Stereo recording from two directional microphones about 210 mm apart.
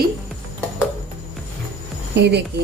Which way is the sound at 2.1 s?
55° right (ahead or behind).